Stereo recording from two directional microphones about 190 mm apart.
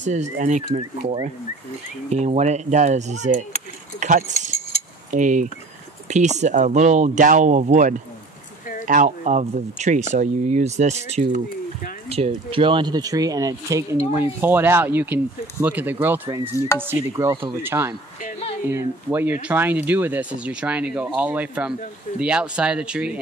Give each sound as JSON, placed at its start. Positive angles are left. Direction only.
{"t": 0.0, "sound": "speech", "side_deg": -40}
{"t": 12.4, "sound": "speech", "side_deg": -25}